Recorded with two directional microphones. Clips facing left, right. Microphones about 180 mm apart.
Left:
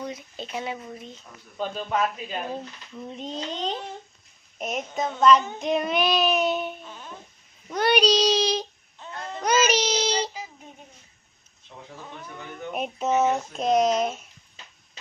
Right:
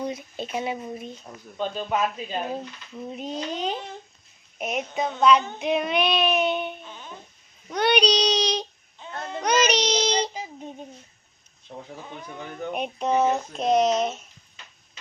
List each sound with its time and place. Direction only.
0.0 s speech: 15° right (ahead or behind)
1.6 s child singing: 5° left (ahead or behind)
2.5 s speech: 10° right (ahead or behind)
4.5 s child singing: 5° right (ahead or behind)
11.7 s speech: 35° right (ahead or behind)
12.7 s child singing: 5° left (ahead or behind)